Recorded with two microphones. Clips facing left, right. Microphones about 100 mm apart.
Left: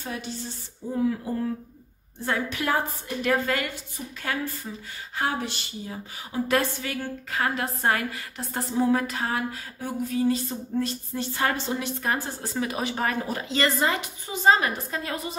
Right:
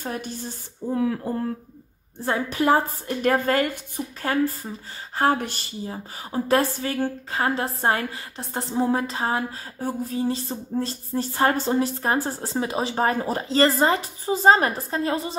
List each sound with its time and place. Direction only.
0.0 s speech: 50° right (ahead or behind); by 1.2 s 65° right (ahead or behind)
1.2 s speech: 45° right (ahead or behind)
2.2 s a woman's voice: 30° right (ahead or behind)
3.2 s a woman's voice: 45° right (ahead or behind)
5.3 s a woman's voice: 50° right (ahead or behind); by 15.3 s 30° right (ahead or behind)